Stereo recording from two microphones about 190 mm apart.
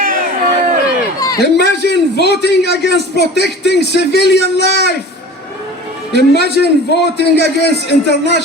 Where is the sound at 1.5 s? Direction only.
60° left (ahead or behind).